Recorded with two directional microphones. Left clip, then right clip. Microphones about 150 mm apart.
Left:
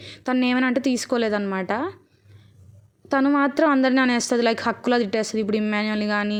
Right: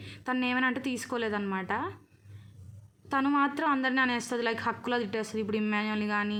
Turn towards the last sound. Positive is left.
turn(degrees=25)  # may be behind; listen again after turning